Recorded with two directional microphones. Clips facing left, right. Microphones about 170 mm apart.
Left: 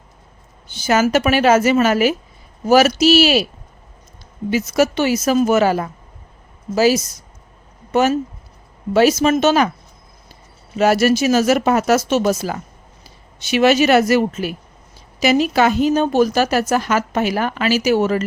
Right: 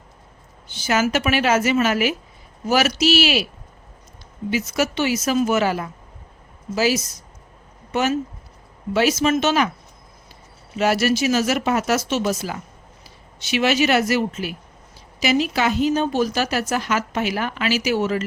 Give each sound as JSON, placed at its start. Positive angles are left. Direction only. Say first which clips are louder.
{"t": 0.7, "sound": "speech", "louder": "left 5 dB", "side_deg": 45}
{"t": 4.5, "sound": "speech", "louder": "left 5 dB", "side_deg": 45}
{"t": 10.8, "sound": "speech", "louder": "left 5 dB", "side_deg": 45}